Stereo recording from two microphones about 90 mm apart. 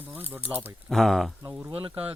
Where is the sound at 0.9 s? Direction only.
5° left (ahead or behind).